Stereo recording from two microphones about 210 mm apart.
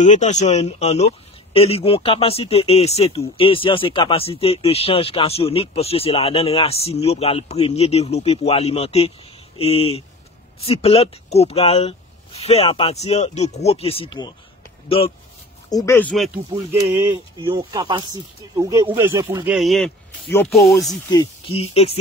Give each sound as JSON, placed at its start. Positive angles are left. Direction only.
{"t": 0.0, "sound": "speech", "side_deg": 35}
{"t": 15.7, "sound": "speech", "side_deg": 15}
{"t": 17.4, "sound": "speech", "side_deg": -25}
{"t": 19.4, "sound": "speech", "side_deg": 0}
{"t": 20.9, "sound": "speech", "side_deg": 20}